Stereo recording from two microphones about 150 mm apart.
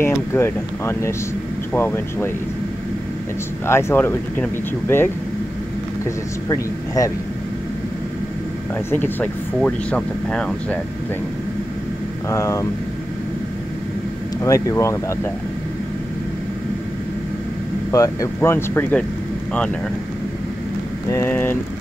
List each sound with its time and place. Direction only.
0.0 s speech: 15° left (ahead or behind)
3.6 s speech: 15° left (ahead or behind)
8.9 s speech: 10° left (ahead or behind)
12.3 s speech: 20° left (ahead or behind)
14.4 s speech: 20° left (ahead or behind)
17.9 s speech: 20° left (ahead or behind)
21.1 s speech: 15° left (ahead or behind)